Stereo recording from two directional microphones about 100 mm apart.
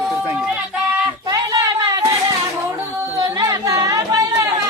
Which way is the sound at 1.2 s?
40° right (ahead or behind).